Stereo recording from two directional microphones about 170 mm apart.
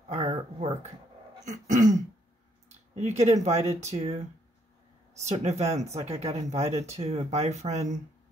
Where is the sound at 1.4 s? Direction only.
45° right (ahead or behind).